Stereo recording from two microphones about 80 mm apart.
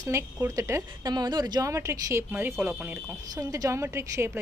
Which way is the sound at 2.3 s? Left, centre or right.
Right.